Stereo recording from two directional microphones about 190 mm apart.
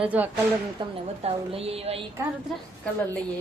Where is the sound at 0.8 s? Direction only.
30° right (ahead or behind).